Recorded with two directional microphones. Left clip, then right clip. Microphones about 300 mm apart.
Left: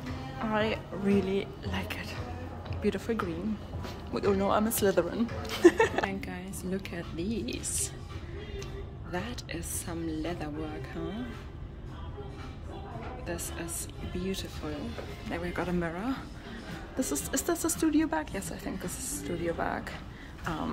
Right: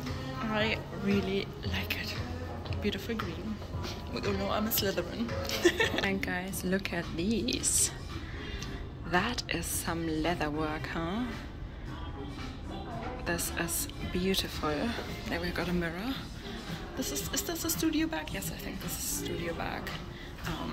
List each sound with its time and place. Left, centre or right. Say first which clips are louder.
0.4 s a woman's voice: left 1 dB; centre
6.0 s a woman's voice: right 3 dB; centre
9.1 s a woman's voice: right 7 dB; centre
13.3 s a woman's voice: right 5 dB; centre
16.9 s speech: left 3 dB; left